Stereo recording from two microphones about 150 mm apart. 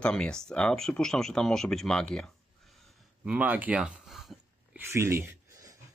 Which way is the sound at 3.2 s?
10° right (ahead or behind).